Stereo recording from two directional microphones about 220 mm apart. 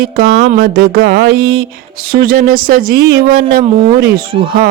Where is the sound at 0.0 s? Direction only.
40° right (ahead or behind).